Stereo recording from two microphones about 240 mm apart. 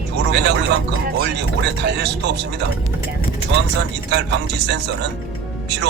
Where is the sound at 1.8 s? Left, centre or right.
Right.